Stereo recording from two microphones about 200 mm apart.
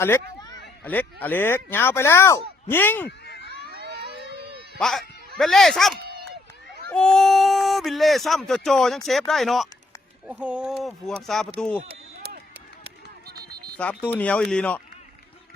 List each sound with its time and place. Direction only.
0.0 s speech: 15° left (ahead or behind)
3.1 s a sound: 55° left (ahead or behind)
3.7 s a sound: 55° right (ahead or behind)
4.8 s speech: centre (ahead or behind)
6.1 s run: 50° right (ahead or behind)
6.8 s speech: 5° left (ahead or behind)
11.9 s run: 55° right (ahead or behind)
13.7 s speech: 10° left (ahead or behind)